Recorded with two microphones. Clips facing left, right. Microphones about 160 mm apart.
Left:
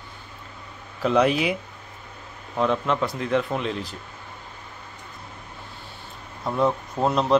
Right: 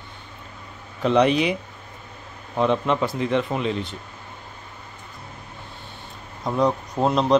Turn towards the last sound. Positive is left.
turn(degrees=-15)  # may be behind; listen again after turning